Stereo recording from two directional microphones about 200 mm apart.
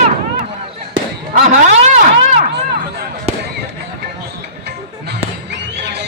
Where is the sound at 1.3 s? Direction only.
35° right (ahead or behind).